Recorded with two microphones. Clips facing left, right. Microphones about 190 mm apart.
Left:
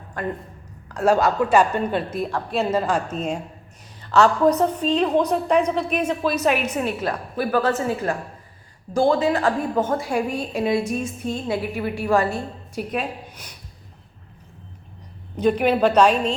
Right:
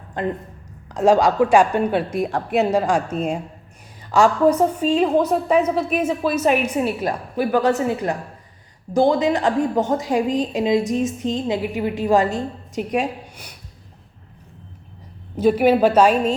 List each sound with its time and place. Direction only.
0.2 s a woman's voice: 20° right (ahead or behind)
15.4 s a woman's voice: 5° right (ahead or behind)